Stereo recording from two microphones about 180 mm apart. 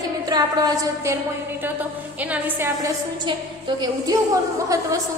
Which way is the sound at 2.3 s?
10° right (ahead or behind).